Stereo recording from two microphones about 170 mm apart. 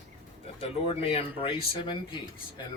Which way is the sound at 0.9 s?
35° left (ahead or behind).